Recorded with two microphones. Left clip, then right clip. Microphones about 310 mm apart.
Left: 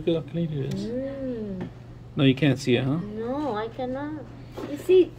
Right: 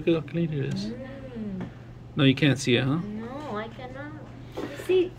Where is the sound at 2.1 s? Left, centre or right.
Centre.